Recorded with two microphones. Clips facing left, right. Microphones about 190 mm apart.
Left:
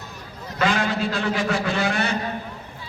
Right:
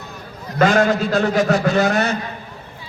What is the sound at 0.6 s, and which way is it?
A man's voice, 45° right (ahead or behind).